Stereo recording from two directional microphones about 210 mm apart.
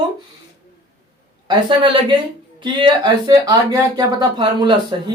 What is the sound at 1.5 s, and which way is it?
Speech, 20° right (ahead or behind).